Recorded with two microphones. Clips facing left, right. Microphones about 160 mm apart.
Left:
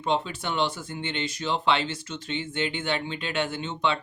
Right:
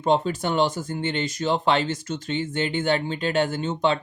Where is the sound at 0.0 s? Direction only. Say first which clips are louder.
Right 6 dB; 45° right (ahead or behind).